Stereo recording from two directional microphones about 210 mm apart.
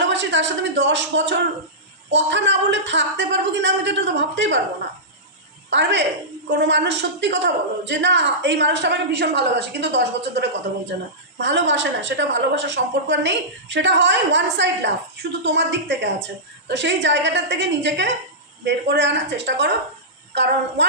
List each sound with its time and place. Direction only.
0.0 s a woman's voice: 60° right (ahead or behind)
5.7 s a woman's voice: 55° right (ahead or behind)
11.3 s a woman's voice: 60° right (ahead or behind)